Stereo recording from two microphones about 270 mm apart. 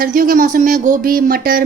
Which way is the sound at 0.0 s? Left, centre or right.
Right.